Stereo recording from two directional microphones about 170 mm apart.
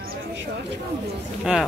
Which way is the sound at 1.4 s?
5° right (ahead or behind).